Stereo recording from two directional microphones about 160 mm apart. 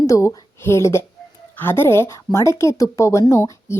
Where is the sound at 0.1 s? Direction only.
20° left (ahead or behind).